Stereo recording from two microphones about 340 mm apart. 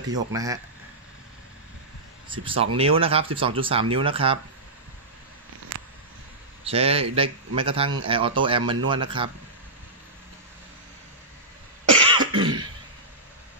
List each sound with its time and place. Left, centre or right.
0.0 s a man's voice: centre
2.2 s a man's voice: centre
5.7 s a sound: right
6.6 s a man's voice: centre
12.2 s cough: centre